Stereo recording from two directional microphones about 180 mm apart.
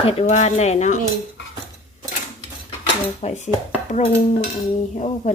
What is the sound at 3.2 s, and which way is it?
Speech, 40° left (ahead or behind).